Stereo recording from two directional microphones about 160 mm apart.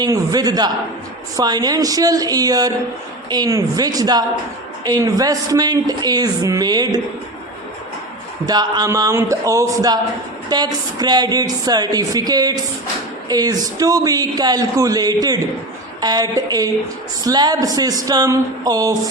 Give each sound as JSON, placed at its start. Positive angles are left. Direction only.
{"t": 0.0, "sound": "a woman's voice", "side_deg": -25}
{"t": 8.4, "sound": "a woman's voice", "side_deg": -25}